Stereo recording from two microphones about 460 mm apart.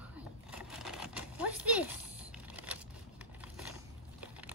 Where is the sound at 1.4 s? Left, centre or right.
Right.